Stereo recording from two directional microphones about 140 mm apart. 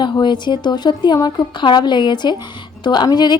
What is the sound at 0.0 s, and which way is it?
A woman's voice, 35° left (ahead or behind).